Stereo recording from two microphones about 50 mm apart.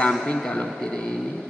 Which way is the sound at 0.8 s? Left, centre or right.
Centre.